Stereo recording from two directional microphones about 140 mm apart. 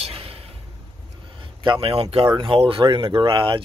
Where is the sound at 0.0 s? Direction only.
45° right (ahead or behind).